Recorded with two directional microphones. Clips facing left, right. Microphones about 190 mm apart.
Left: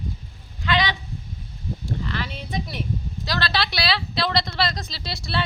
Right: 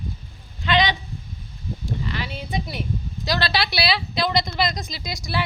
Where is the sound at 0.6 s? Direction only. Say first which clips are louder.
Right 3 dB; 20° right (ahead or behind).